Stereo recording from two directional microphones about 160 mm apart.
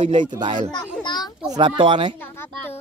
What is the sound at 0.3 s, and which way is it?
Speech, 30° right (ahead or behind).